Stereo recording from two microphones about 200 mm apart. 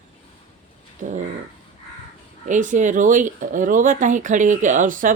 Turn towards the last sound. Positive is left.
turn(degrees=-40)  # may be behind; listen again after turning